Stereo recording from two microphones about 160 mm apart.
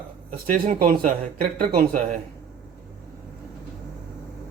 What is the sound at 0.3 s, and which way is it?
Speech, 55° right (ahead or behind).